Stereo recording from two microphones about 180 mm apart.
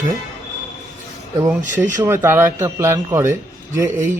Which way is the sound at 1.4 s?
10° right (ahead or behind).